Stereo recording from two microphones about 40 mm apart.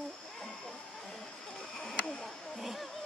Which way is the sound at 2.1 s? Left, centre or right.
Centre.